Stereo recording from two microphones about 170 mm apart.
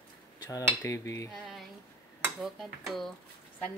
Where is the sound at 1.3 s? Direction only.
Centre (ahead or behind).